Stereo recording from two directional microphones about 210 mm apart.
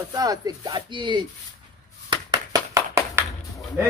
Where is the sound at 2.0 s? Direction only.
15° right (ahead or behind).